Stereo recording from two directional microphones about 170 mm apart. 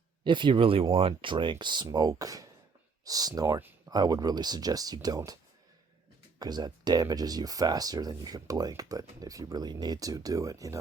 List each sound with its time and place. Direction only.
0.3 s speech: 30° right (ahead or behind)
6.4 s speech: 25° right (ahead or behind)